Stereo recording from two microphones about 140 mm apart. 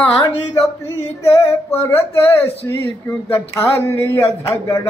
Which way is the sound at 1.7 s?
15° left (ahead or behind).